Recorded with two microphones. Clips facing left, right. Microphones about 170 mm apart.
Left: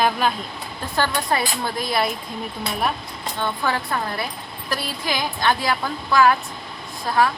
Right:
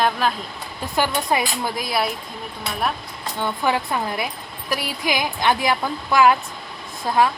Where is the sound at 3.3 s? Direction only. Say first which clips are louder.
Right 2 dB; 15° right (ahead or behind).